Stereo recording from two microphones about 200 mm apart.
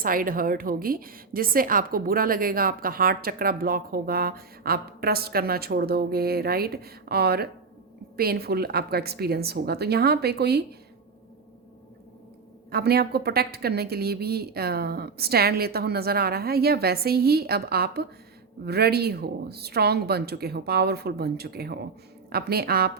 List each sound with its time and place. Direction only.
0.0 s a woman's voice: 45° right (ahead or behind)
12.7 s a woman's voice: 50° right (ahead or behind)